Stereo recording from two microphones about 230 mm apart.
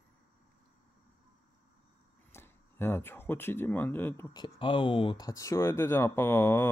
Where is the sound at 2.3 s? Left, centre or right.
Centre.